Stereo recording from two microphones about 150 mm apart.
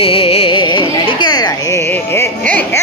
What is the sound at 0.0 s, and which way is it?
Carnatic music, 40° left (ahead or behind).